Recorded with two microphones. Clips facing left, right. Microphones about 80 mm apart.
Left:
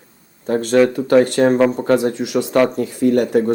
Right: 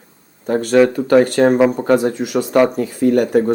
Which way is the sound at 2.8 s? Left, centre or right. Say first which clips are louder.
Right 1 dB; right.